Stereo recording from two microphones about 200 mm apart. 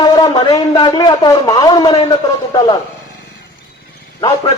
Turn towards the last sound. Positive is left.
turn(degrees=25)  # may be behind; listen again after turning